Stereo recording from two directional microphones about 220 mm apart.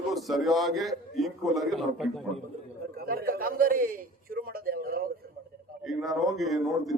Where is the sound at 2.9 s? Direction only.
45° right (ahead or behind).